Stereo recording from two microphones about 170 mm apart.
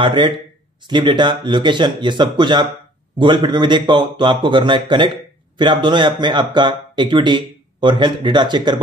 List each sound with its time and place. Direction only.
0.0 s speech: 30° right (ahead or behind)